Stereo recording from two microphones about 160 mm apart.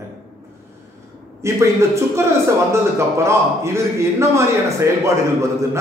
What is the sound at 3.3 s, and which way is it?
A man's voice, 15° right (ahead or behind).